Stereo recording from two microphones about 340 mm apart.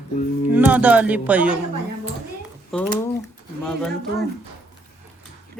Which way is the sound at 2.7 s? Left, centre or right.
Centre.